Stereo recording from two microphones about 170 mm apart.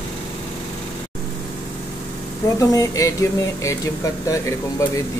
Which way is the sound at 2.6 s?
20° left (ahead or behind).